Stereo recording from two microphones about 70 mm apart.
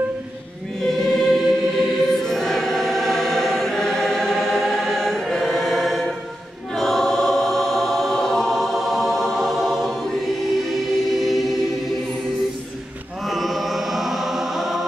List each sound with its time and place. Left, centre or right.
1.2 s choir: centre
13.2 s chant: centre